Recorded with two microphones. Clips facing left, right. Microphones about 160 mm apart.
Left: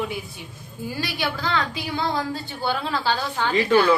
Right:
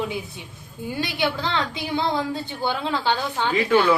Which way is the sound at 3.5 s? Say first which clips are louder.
Left 2 dB; centre (ahead or behind).